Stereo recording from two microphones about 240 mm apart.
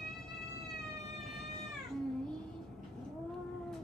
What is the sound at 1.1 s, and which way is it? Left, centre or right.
Cat, centre.